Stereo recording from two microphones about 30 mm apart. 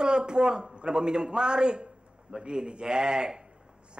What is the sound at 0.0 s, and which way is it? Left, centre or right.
A man's voice, right.